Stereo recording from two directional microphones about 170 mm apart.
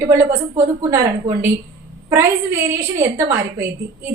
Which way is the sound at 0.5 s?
20° right (ahead or behind).